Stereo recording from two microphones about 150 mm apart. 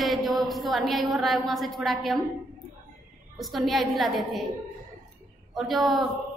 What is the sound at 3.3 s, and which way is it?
A woman's voice, centre (ahead or behind).